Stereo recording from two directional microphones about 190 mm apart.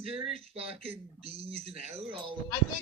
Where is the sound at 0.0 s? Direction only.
30° right (ahead or behind).